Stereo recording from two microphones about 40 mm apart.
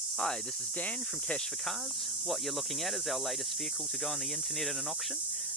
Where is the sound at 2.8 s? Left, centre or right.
Centre.